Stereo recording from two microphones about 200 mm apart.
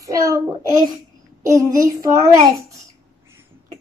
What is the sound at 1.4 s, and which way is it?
A child's voice, 15° right (ahead or behind).